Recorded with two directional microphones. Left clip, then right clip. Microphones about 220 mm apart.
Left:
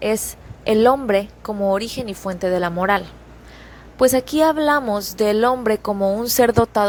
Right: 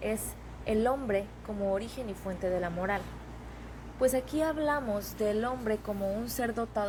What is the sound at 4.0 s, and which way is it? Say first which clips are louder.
A woman's voice: left 13 dB; 45° left (ahead or behind).